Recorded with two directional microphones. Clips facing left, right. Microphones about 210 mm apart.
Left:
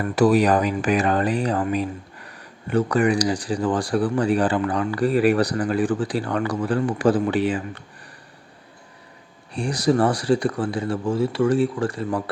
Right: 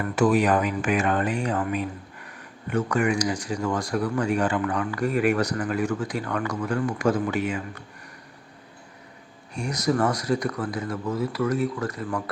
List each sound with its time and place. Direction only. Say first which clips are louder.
0.2 s speech: left 3 dB; 35° left (ahead or behind)
9.6 s speech: left 4 dB; 30° left (ahead or behind)